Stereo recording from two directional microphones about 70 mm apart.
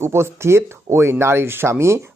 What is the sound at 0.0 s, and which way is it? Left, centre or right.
Speech, right.